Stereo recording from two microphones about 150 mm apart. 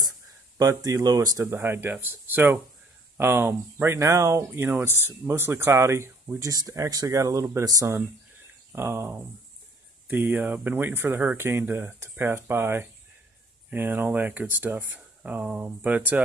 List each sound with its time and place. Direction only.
0.6 s speech: 20° right (ahead or behind)